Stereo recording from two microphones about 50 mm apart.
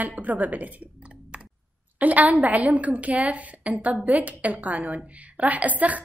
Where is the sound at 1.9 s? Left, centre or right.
Right.